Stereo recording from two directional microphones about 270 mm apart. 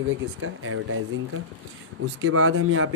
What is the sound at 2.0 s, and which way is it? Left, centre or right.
Speech, right.